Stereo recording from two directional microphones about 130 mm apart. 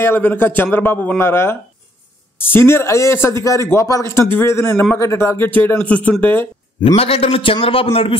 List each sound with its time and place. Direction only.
0.0 s a man's voice: 15° left (ahead or behind)
7.0 s a man's voice: 50° left (ahead or behind)